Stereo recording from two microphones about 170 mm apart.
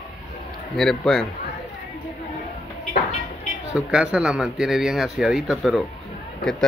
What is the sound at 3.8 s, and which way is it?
Speech, 5° right (ahead or behind).